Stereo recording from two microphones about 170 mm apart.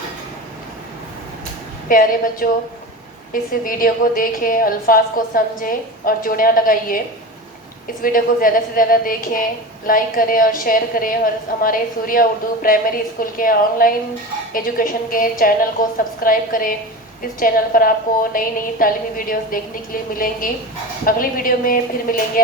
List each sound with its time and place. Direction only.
1.9 s a woman's voice: 55° left (ahead or behind)
3.6 s a woman's voice: 55° left (ahead or behind)
8.0 s a woman's voice: 55° left (ahead or behind)